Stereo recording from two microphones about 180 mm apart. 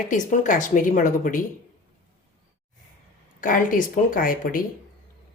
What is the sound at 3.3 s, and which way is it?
Speech, 50° left (ahead or behind).